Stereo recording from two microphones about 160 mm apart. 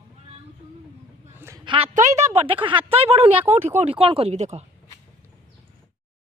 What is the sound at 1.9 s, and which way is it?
A woman's voice, 45° right (ahead or behind).